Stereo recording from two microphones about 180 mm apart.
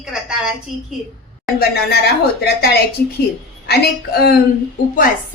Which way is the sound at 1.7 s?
65° left (ahead or behind).